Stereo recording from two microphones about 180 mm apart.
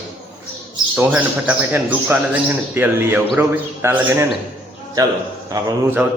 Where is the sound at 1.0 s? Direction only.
10° right (ahead or behind).